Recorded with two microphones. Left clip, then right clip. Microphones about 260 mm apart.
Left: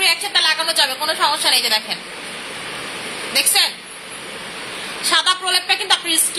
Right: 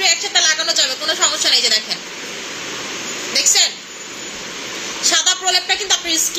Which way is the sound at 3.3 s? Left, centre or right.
Centre.